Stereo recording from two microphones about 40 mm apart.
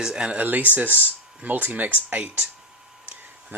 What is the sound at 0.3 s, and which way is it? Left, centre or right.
Speech, right.